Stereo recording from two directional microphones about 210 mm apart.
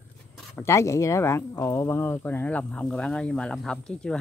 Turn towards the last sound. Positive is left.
turn(degrees=5)  # may be behind; listen again after turning